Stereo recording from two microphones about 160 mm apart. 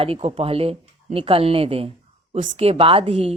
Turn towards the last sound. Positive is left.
turn(degrees=-40)  # may be behind; listen again after turning